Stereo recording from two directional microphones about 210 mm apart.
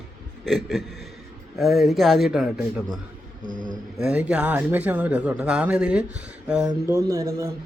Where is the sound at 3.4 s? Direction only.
40° right (ahead or behind).